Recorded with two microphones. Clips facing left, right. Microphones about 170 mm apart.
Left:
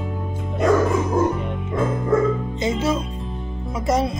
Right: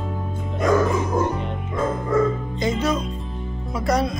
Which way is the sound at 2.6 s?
25° left (ahead or behind).